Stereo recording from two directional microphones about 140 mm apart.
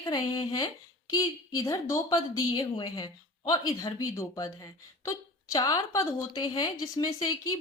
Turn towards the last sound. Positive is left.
turn(degrees=25)  # may be behind; listen again after turning